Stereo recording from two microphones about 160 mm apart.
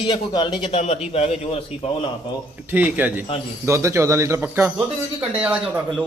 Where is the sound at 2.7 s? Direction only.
10° right (ahead or behind).